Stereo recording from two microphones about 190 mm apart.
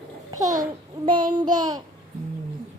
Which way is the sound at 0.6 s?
25° right (ahead or behind).